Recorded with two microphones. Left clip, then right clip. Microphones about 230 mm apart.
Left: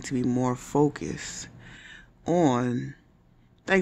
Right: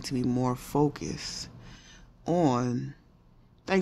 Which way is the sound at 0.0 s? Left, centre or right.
Centre.